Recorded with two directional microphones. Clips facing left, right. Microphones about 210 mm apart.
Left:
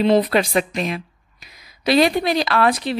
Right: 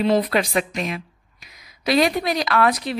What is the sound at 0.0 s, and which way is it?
A woman's voice, 25° left (ahead or behind).